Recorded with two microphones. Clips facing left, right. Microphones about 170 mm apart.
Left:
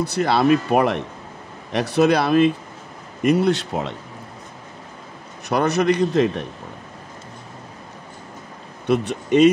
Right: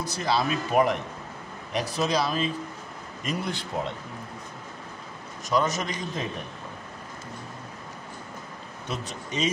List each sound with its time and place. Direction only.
0.0 s speech: 65° left (ahead or behind)
5.5 s speech: 65° left (ahead or behind)
8.8 s speech: 65° left (ahead or behind)